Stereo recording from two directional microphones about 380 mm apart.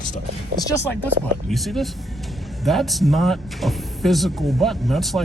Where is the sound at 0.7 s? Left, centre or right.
Centre.